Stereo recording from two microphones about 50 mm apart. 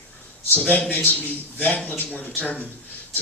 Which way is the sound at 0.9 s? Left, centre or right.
Left.